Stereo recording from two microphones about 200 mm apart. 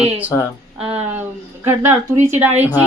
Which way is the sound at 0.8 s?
30° right (ahead or behind).